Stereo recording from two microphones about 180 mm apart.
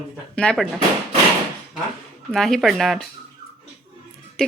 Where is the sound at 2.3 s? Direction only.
Centre (ahead or behind).